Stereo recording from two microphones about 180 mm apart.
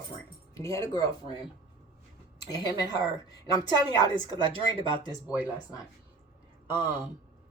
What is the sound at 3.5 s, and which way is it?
Speech, 25° left (ahead or behind).